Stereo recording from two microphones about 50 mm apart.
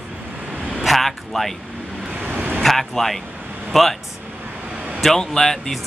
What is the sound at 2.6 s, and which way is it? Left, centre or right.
Speech, centre.